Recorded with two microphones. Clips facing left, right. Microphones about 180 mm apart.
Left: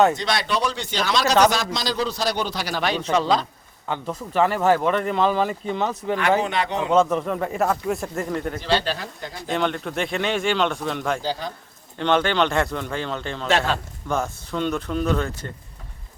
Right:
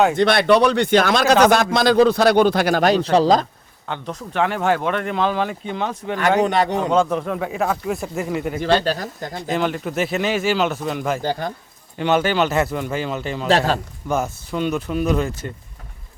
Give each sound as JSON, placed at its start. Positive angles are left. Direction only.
{"t": 0.2, "sound": "a man's voice", "side_deg": -60}
{"t": 3.8, "sound": "speech", "side_deg": 5}
{"t": 6.4, "sound": "speech", "side_deg": -40}
{"t": 6.9, "sound": "speech", "side_deg": 0}
{"t": 8.6, "sound": "speech", "side_deg": -45}
{"t": 9.5, "sound": "speech", "side_deg": -5}
{"t": 11.2, "sound": "speech", "side_deg": -55}
{"t": 11.9, "sound": "speech", "side_deg": -5}
{"t": 13.5, "sound": "a man's voice", "side_deg": -40}
{"t": 14.1, "sound": "speech", "side_deg": -5}